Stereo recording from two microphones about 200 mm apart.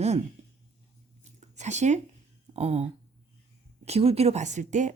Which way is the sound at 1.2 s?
35° right (ahead or behind).